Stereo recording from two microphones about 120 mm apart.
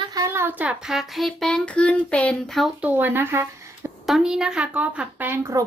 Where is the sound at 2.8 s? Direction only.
15° right (ahead or behind).